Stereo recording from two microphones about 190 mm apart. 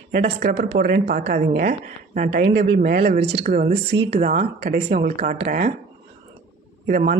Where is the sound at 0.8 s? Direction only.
50° right (ahead or behind).